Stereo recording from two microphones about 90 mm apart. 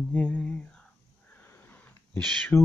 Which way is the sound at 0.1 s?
15° left (ahead or behind).